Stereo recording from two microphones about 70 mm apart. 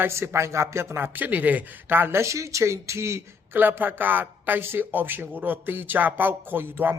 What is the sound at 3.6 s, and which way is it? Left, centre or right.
Speech, right.